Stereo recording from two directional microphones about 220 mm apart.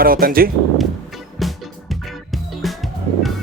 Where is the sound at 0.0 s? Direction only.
40° right (ahead or behind).